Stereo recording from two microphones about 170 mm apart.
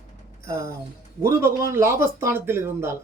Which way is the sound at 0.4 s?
15° right (ahead or behind).